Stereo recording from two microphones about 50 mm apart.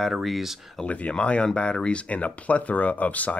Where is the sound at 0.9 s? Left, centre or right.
Left.